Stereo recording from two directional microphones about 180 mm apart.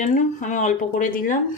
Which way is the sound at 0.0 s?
45° left (ahead or behind).